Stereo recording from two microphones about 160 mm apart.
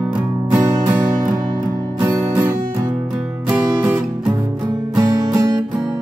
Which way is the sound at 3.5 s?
10° right (ahead or behind).